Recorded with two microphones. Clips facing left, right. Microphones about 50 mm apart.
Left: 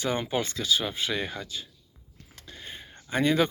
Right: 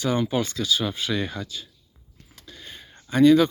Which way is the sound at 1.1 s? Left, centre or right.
Centre.